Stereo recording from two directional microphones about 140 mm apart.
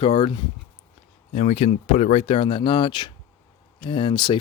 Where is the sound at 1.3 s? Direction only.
50° left (ahead or behind).